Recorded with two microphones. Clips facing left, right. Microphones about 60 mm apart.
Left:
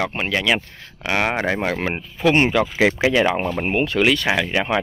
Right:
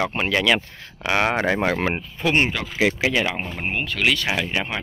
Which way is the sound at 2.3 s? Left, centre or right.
Left.